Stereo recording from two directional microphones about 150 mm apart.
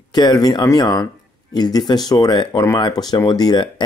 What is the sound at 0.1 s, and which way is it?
Speech, 25° left (ahead or behind).